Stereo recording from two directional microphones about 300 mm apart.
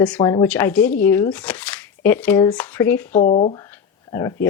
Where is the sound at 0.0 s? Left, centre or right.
Centre.